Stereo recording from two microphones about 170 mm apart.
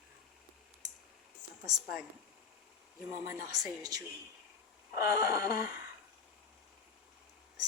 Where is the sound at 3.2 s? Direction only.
20° right (ahead or behind).